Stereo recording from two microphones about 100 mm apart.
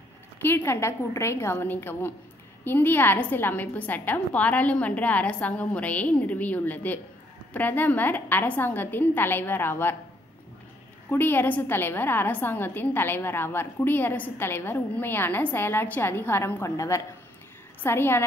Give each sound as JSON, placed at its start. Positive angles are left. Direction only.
{"t": 0.4, "sound": "a woman's voice", "side_deg": 20}
{"t": 11.1, "sound": "a woman's voice", "side_deg": 20}